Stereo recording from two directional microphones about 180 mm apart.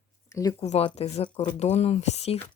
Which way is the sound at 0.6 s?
35° left (ahead or behind).